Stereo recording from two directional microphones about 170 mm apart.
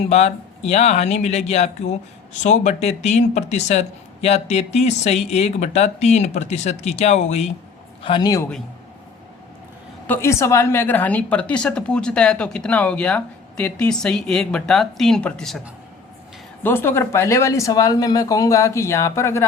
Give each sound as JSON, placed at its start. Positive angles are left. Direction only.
{"t": 0.1, "sound": "speech", "side_deg": 40}
{"t": 8.0, "sound": "a man's voice", "side_deg": 25}
{"t": 10.1, "sound": "a woman's voice", "side_deg": 15}
{"t": 16.6, "sound": "speech", "side_deg": 15}